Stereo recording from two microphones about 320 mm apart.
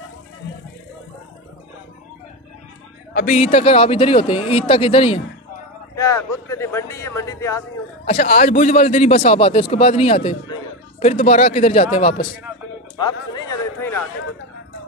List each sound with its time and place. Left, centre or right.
3.2 s speech: left
8.1 s a man's voice: left
13.0 s a sound: centre